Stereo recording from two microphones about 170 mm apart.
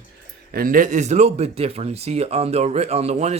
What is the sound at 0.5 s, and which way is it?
Speech, 55° right (ahead or behind).